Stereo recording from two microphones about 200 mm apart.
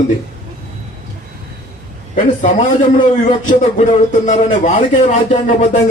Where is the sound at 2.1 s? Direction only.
40° left (ahead or behind).